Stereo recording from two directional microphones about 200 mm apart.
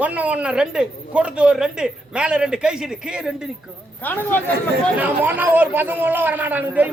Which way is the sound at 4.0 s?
10° left (ahead or behind).